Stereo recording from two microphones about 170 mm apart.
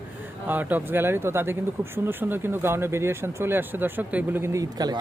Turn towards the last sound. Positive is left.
turn(degrees=-20)  # may be behind; listen again after turning